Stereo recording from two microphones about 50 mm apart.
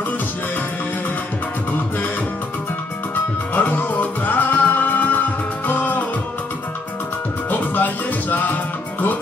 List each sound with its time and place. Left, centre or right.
3.5 s music: left
7.4 s music: left